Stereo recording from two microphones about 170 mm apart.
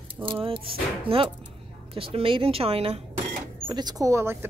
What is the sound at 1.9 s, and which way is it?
A woman's voice, 35° right (ahead or behind).